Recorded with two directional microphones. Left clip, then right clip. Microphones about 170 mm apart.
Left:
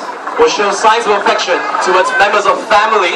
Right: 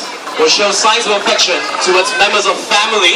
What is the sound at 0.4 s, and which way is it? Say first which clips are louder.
Speech: even; 30° right (ahead or behind).